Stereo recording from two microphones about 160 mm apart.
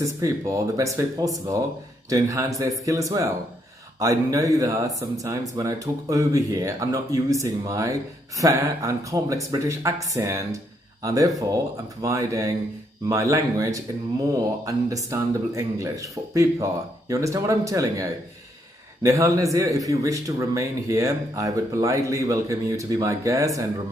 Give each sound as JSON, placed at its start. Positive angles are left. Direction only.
{"t": 0.0, "sound": "a man's voice", "side_deg": -20}